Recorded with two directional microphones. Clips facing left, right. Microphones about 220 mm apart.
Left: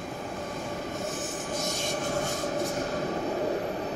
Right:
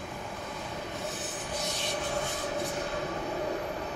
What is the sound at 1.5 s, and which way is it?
Train, 45° left (ahead or behind).